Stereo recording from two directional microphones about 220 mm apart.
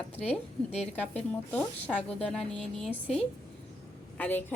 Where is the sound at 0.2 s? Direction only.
30° left (ahead or behind).